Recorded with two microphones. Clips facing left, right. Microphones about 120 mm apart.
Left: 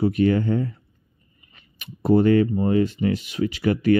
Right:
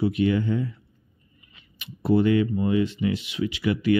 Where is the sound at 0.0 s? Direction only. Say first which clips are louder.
Left 3 dB; 45° left (ahead or behind).